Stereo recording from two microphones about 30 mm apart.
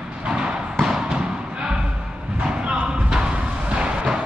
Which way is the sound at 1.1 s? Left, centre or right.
Right.